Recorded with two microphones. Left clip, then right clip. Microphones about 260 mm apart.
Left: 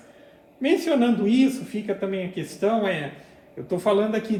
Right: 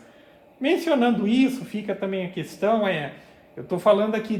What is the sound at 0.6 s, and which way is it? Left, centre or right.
A man's voice, right.